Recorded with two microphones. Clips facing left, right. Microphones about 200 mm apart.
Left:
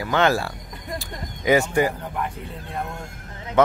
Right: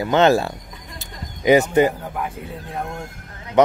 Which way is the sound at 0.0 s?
25° right (ahead or behind).